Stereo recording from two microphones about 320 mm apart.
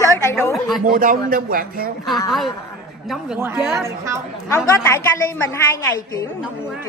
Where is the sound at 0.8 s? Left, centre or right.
Right.